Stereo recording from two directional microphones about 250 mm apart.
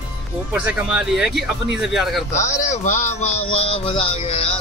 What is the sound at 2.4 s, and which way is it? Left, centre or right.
Speech, left.